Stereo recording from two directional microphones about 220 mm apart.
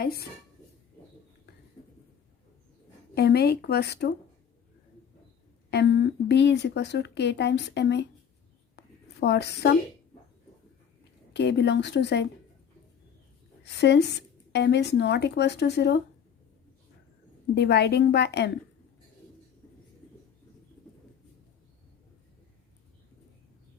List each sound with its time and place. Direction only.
0.0 s a woman's voice: 45° left (ahead or behind)
3.2 s speech: 45° left (ahead or behind)
5.7 s speech: 50° left (ahead or behind)
9.2 s speech: 50° left (ahead or behind)
11.3 s speech: 50° left (ahead or behind)
13.7 s speech: 50° left (ahead or behind)
17.5 s speech: 50° left (ahead or behind)